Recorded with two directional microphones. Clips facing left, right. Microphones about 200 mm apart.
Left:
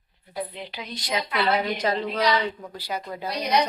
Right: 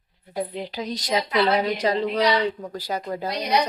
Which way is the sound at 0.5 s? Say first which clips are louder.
Right 7 dB; 40° right (ahead or behind).